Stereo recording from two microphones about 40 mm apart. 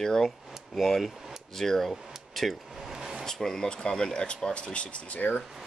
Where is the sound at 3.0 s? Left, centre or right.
Centre.